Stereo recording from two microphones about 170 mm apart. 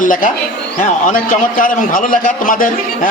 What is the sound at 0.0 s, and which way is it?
A man's voice, 50° left (ahead or behind).